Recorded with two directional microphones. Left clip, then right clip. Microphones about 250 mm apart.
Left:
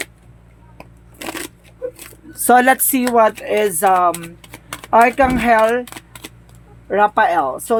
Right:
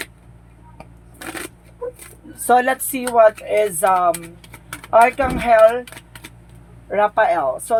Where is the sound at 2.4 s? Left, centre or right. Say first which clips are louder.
Left 4 dB; left.